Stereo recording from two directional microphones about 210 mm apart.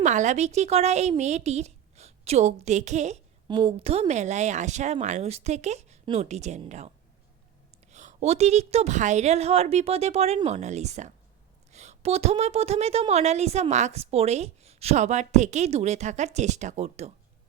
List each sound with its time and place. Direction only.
0.0 s a woman's voice: 35° right (ahead or behind)